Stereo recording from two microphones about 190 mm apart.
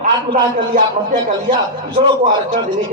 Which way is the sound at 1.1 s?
25° right (ahead or behind).